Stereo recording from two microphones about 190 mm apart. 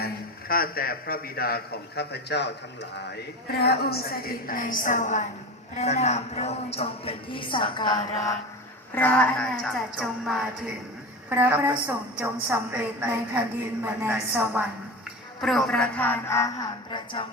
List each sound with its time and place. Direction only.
0.0 s a man's voice: 50° left (ahead or behind); by 8.2 s 25° left (ahead or behind)
9.0 s a sound: 10° left (ahead or behind)
11.3 s a woman's voice: 10° right (ahead or behind)
15.4 s a man's voice: centre (ahead or behind); by 17.2 s 25° left (ahead or behind)